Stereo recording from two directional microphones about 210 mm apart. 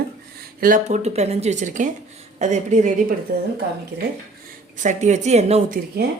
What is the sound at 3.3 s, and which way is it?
Speech, 45° right (ahead or behind).